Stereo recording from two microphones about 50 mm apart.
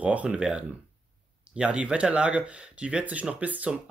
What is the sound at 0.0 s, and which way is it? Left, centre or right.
Speech, right.